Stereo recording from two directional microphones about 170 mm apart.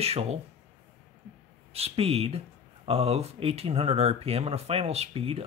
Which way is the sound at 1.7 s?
35° right (ahead or behind).